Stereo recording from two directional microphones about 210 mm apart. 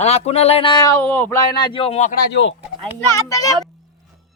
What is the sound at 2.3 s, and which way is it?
Speech, 60° left (ahead or behind).